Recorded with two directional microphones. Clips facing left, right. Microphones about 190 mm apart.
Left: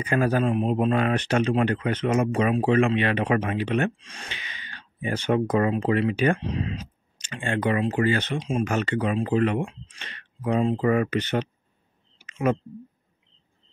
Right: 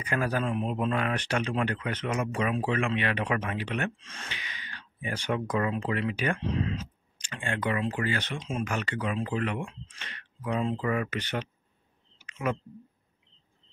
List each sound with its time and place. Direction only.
0.0 s speech: 25° left (ahead or behind)
4.0 s gasp: 15° left (ahead or behind)
5.5 s speech: 30° left (ahead or behind)
6.4 s speech: 15° left (ahead or behind); by 11.1 s 35° left (ahead or behind)
11.1 s speech: 25° left (ahead or behind)
12.2 s a sound: 30° left (ahead or behind)